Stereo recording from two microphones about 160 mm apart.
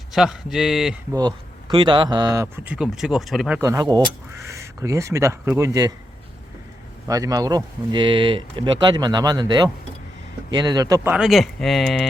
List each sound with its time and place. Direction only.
0.1 s speech: centre (ahead or behind)
1.1 s speech: 30° right (ahead or behind)
2.6 s speech: 5° right (ahead or behind)
3.6 s speech: 20° right (ahead or behind)
7.1 s speech: 20° right (ahead or behind)
11.1 s speech: centre (ahead or behind)